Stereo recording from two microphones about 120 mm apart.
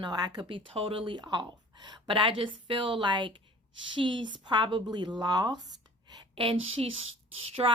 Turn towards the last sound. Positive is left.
turn(degrees=-50)  # may be behind; listen again after turning